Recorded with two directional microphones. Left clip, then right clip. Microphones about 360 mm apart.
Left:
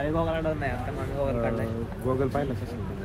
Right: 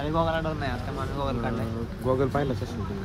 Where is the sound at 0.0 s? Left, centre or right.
Centre.